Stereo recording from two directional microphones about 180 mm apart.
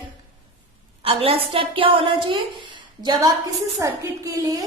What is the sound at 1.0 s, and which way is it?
A woman's voice, 30° right (ahead or behind).